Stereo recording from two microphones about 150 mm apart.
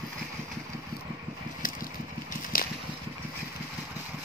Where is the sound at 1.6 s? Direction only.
65° left (ahead or behind).